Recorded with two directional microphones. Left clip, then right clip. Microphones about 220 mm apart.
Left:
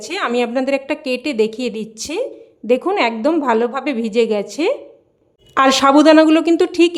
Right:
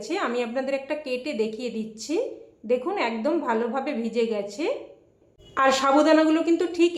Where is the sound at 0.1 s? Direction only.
45° left (ahead or behind).